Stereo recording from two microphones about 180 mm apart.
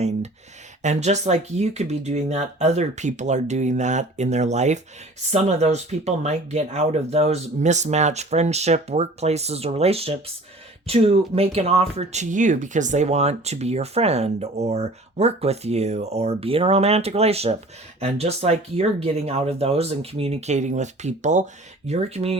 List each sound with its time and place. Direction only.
0.8 s speech: 40° right (ahead or behind)